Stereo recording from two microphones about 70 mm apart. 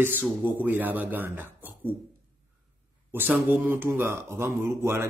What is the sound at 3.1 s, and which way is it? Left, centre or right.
Speech, right.